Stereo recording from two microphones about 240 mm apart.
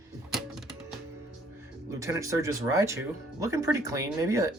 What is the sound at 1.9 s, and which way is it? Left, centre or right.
Speech, centre.